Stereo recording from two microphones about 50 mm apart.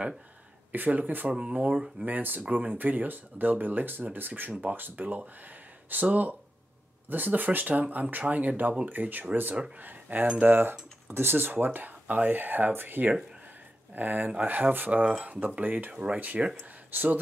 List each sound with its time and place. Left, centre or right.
0.7 s speech: right
1.3 s speech: right
2.0 s speech: right
4.5 s speech: right
15.0 s speech: right
15.9 s speech: right